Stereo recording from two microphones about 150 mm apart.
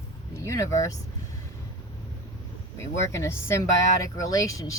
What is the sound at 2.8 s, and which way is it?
Speech, 20° left (ahead or behind).